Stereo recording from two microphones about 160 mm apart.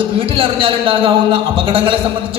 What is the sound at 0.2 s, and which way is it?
A man's voice, 35° right (ahead or behind).